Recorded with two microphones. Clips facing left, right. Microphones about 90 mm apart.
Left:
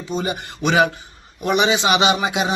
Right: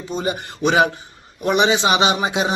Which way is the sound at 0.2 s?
25° right (ahead or behind).